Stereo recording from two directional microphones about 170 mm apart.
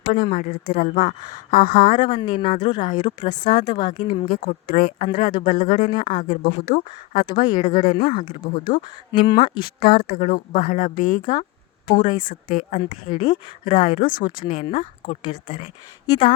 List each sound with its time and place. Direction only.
0.1 s a woman's voice: 55° left (ahead or behind)
2.0 s speech: 25° left (ahead or behind)
3.2 s speech: 50° left (ahead or behind)
3.5 s speech: 25° left (ahead or behind)
4.3 s a woman's voice: 55° left (ahead or behind)
5.9 s speech: 25° left (ahead or behind)
6.1 s a woman's voice: 50° left (ahead or behind)
7.2 s speech: 25° left (ahead or behind)
7.6 s a woman's voice: 40° left (ahead or behind); by 8.8 s 55° left (ahead or behind)
9.1 s speech: 30° left (ahead or behind)
9.8 s a woman's voice: 65° left (ahead or behind)
10.3 s speech: 50° left (ahead or behind)